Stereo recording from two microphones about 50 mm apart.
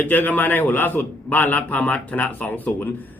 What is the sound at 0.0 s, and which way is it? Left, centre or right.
A man's voice, left.